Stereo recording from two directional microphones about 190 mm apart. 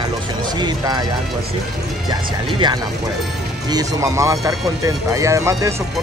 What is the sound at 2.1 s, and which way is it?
Speech, 25° right (ahead or behind).